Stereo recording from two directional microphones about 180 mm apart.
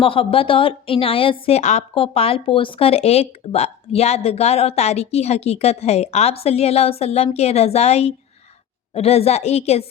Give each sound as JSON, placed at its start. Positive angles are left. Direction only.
{"t": 0.0, "sound": "a woman's voice", "side_deg": 30}